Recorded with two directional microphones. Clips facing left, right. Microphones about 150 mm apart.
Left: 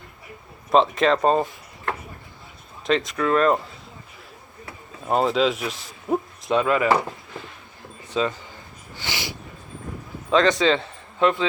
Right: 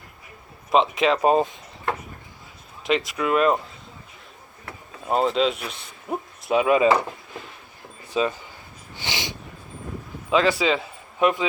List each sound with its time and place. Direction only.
0.7 s speech: centre (ahead or behind)
3.2 s speech: 10° right (ahead or behind)
5.0 s a man's voice: centre (ahead or behind); by 6.8 s 15° right (ahead or behind)
8.1 s speech: 15° right (ahead or behind)
9.0 s a sound: 15° right (ahead or behind)
10.3 s a man's voice: 5° right (ahead or behind)